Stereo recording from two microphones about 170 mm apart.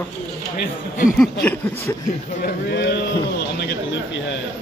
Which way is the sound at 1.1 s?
Centre (ahead or behind).